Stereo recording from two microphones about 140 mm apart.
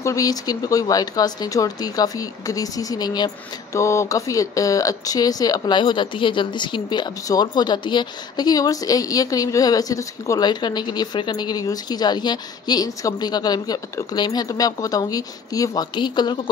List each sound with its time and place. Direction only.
0.0 s speech: 25° left (ahead or behind)